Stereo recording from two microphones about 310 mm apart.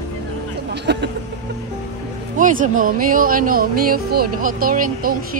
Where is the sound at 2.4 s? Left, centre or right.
Right.